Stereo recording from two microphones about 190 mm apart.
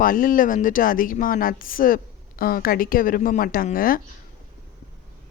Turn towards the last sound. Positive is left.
turn(degrees=50)  # may be behind; listen again after turning